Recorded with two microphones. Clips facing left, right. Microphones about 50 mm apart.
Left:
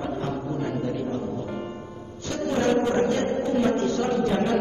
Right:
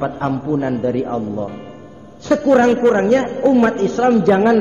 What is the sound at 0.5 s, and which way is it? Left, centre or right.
Speech, right.